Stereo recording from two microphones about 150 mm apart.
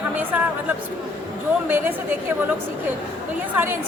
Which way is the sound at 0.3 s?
10° right (ahead or behind).